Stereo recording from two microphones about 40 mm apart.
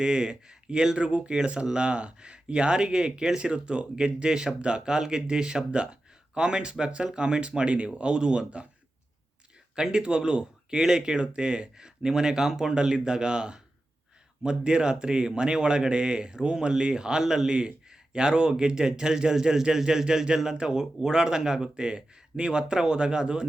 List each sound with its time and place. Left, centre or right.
0.0 s speech: centre
9.7 s speech: right